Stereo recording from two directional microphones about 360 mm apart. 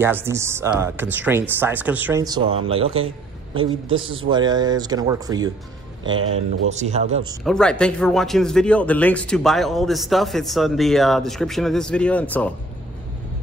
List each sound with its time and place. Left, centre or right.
0.0 s speech: centre
6.7 s speech: centre
7.4 s speech: centre